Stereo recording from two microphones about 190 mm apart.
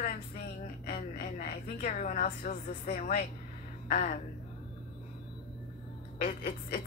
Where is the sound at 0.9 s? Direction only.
35° left (ahead or behind).